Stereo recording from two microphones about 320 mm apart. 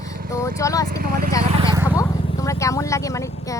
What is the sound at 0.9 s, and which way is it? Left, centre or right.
Speech, right.